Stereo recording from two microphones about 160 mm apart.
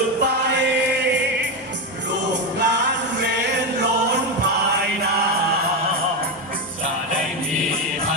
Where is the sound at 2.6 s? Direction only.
90° right.